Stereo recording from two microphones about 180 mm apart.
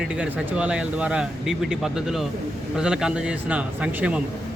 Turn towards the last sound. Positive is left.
turn(degrees=-5)  # may be behind; listen again after turning